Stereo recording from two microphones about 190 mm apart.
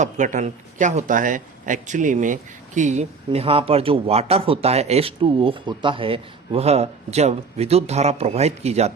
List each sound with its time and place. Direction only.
0.0 s speech: 40° right (ahead or behind)